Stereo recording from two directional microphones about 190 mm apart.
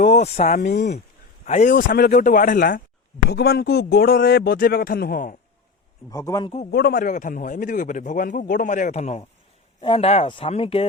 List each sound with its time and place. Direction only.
0.0 s a man's voice: 40° left (ahead or behind)
3.2 s a man's voice: 55° left (ahead or behind)
6.1 s a man's voice: 15° left (ahead or behind)
6.7 s a man's voice: 50° left (ahead or behind); by 10.8 s 30° left (ahead or behind)